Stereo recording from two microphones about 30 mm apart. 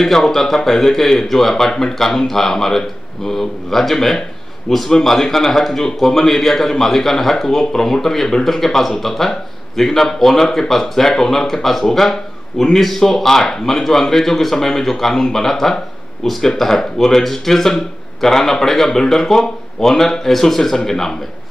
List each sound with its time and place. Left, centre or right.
0.0 s a man's voice: centre
1.7 s speech: left
2.0 s a man's voice: centre